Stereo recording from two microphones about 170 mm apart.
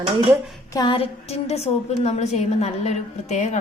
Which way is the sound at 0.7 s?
25° left (ahead or behind).